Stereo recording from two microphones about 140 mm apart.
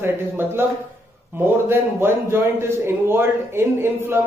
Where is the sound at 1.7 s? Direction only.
15° right (ahead or behind).